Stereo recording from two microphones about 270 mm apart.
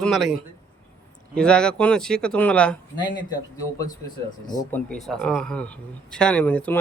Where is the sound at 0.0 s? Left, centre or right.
Centre.